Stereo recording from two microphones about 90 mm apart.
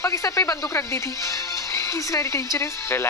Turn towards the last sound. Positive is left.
turn(degrees=30)  # may be behind; listen again after turning